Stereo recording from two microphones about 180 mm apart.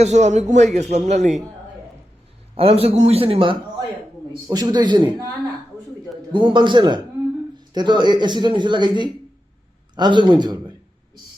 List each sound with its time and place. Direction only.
0.0 s a man's voice: 40° right (ahead or behind)
2.6 s a man's voice: 35° right (ahead or behind)
6.3 s speech: 25° right (ahead or behind)